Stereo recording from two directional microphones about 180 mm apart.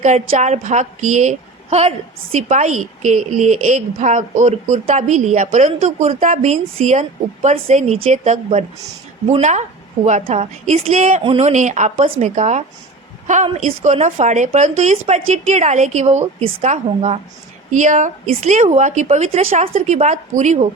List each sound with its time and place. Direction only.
0.0 s a woman's voice: 40° right (ahead or behind)